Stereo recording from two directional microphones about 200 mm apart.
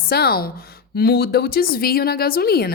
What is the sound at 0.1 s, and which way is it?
Speech, 50° left (ahead or behind).